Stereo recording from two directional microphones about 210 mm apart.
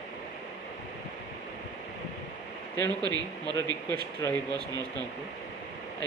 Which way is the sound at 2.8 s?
5° left (ahead or behind).